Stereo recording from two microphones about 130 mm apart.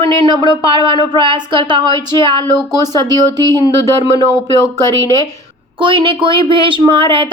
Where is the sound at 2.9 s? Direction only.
30° right (ahead or behind).